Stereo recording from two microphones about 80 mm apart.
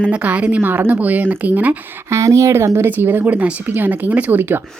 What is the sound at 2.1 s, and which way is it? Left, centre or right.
A woman's voice, right.